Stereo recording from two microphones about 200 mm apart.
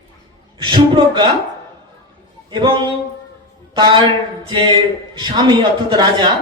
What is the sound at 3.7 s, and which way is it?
A woman's voice, 25° right (ahead or behind).